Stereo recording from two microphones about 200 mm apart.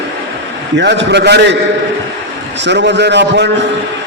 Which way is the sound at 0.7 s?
60° right (ahead or behind).